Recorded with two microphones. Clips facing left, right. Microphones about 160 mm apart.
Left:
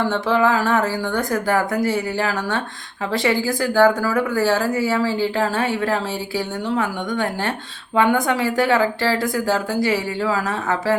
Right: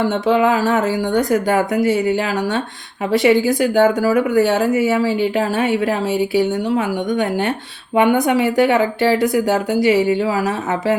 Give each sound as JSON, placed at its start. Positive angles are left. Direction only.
{"t": 0.1, "sound": "speech", "side_deg": -20}